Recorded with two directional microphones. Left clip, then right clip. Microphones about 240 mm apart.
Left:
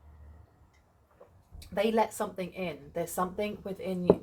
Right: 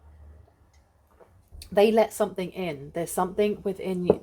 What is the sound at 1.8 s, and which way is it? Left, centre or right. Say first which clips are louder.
A woman's voice: right 8 dB; right.